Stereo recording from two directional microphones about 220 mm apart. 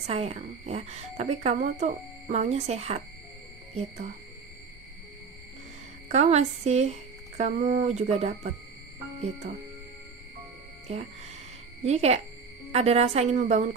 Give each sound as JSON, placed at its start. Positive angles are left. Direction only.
{"t": 0.1, "sound": "speech", "side_deg": -30}
{"t": 6.1, "sound": "speech", "side_deg": -30}
{"t": 10.9, "sound": "speech", "side_deg": -30}